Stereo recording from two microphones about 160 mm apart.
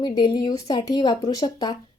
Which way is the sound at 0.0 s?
25° left (ahead or behind).